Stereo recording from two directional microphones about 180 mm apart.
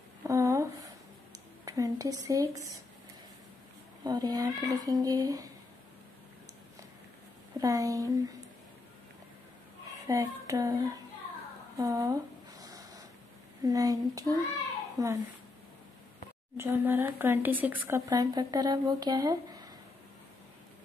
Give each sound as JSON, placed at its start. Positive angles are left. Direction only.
{"t": 0.2, "sound": "a sound", "side_deg": -15}
{"t": 1.6, "sound": "a woman's voice", "side_deg": -20}
{"t": 4.0, "sound": "speech", "side_deg": -20}
{"t": 7.5, "sound": "speech", "side_deg": -20}
{"t": 9.9, "sound": "speech", "side_deg": -20}
{"t": 11.7, "sound": "a sound", "side_deg": -20}
{"t": 13.7, "sound": "speech", "side_deg": -20}
{"t": 16.5, "sound": "speech", "side_deg": -15}